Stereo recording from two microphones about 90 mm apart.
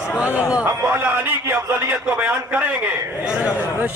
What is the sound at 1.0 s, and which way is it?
A man's voice, 20° right (ahead or behind).